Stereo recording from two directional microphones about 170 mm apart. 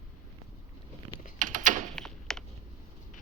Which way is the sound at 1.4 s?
50° right (ahead or behind).